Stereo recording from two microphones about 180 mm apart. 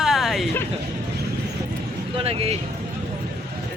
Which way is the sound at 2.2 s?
35° right (ahead or behind).